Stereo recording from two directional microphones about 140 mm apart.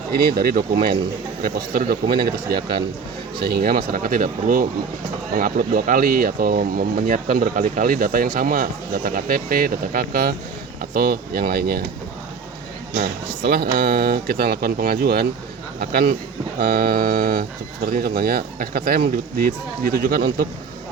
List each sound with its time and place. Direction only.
0.1 s speech: 90° right
12.9 s speech: 90° right